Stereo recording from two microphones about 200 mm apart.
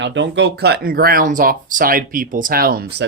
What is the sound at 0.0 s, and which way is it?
Speech, 65° right (ahead or behind).